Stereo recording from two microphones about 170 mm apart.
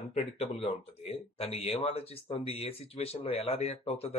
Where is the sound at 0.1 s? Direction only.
35° left (ahead or behind).